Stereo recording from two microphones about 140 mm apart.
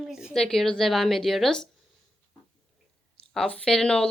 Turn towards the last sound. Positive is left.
turn(degrees=5)  # may be behind; listen again after turning